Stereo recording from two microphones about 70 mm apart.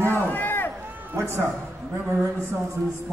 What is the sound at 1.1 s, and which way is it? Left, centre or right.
Speech, right.